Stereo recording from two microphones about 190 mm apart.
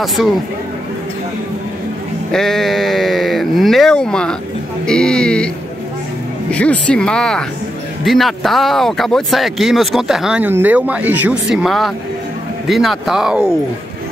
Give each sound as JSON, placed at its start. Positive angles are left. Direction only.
{"t": 0.0, "sound": "speech", "side_deg": 0}
{"t": 2.3, "sound": "speech", "side_deg": 0}
{"t": 6.5, "sound": "speech", "side_deg": 5}